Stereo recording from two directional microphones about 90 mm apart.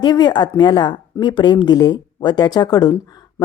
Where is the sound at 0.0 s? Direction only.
50° left (ahead or behind).